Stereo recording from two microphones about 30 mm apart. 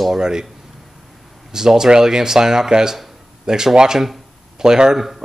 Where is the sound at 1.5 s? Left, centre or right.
Centre.